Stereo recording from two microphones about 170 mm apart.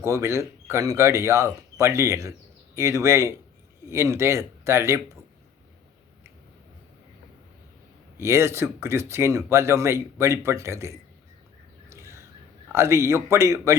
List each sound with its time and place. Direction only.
0.0 s speech: 15° right (ahead or behind)
8.2 s speech: 15° right (ahead or behind)
11.9 s a sound: 15° right (ahead or behind)
12.7 s speech: 15° right (ahead or behind)